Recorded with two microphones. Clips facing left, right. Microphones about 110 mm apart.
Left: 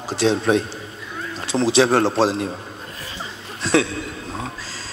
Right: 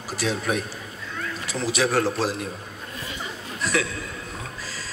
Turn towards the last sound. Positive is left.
turn(degrees=30)  # may be behind; listen again after turning